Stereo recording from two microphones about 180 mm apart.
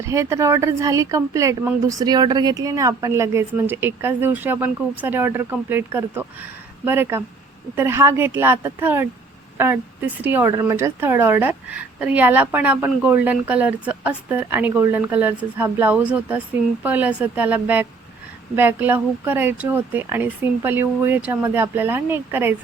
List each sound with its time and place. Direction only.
0.0 s speech: 15° right (ahead or behind)